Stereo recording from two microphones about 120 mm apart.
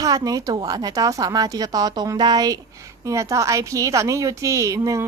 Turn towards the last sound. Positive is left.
turn(degrees=-25)  # may be behind; listen again after turning